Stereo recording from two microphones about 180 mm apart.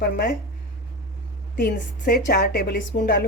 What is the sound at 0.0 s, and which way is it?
Speech, 60° left (ahead or behind).